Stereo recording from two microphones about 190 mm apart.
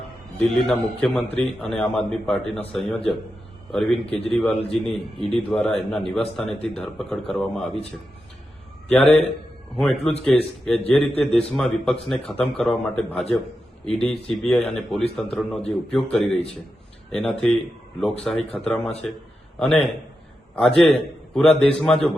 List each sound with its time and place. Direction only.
0.3 s a man's voice: 5° left (ahead or behind)
4.0 s a man's voice: 30° left (ahead or behind)
4.3 s a man's voice: centre (ahead or behind)
8.9 s a man's voice: 5° left (ahead or behind)